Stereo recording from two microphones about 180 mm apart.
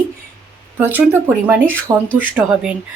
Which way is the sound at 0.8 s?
10° right (ahead or behind).